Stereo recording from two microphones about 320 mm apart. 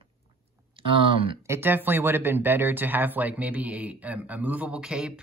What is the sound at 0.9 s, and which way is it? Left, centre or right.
Speech, centre.